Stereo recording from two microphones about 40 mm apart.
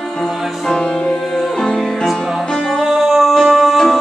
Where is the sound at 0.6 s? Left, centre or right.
Left.